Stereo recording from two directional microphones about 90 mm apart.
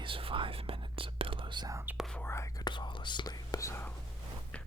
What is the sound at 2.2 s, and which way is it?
Whispering, 30° left (ahead or behind).